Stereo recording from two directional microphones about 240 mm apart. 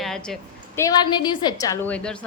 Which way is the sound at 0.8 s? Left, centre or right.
Centre.